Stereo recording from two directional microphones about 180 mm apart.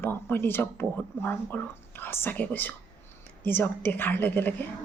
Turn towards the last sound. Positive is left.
turn(degrees=10)  # may be behind; listen again after turning